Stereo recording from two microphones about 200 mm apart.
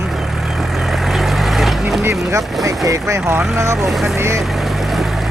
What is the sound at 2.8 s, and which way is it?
Speech, 15° right (ahead or behind).